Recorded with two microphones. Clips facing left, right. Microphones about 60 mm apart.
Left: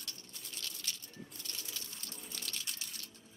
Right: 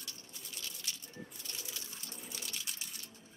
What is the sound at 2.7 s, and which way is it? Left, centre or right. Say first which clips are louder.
Music: even; centre.